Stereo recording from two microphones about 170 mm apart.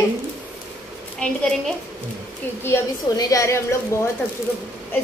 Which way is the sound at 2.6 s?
20° left (ahead or behind).